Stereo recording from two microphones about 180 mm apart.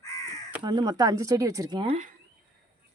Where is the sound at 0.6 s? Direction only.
25° right (ahead or behind).